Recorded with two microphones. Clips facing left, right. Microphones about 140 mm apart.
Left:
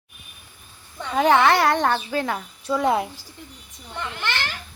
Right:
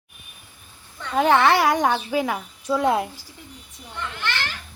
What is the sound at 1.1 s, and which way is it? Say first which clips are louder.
Speech: even; centre (ahead or behind).